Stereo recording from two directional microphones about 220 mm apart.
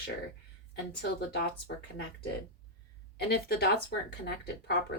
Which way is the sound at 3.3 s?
45° left (ahead or behind).